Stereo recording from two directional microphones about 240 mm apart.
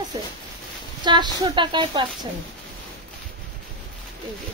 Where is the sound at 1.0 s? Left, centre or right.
Centre.